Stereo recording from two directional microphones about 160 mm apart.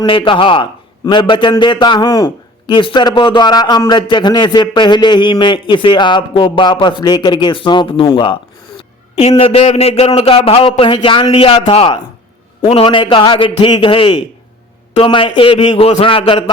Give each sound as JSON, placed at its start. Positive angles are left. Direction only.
{"t": 0.0, "sound": "a man's voice", "side_deg": 30}
{"t": 15.7, "sound": "a man's voice", "side_deg": 40}